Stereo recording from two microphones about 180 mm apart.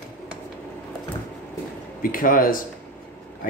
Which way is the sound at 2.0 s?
50° left (ahead or behind).